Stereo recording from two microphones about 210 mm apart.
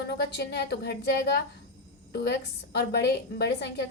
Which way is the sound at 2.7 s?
50° left (ahead or behind).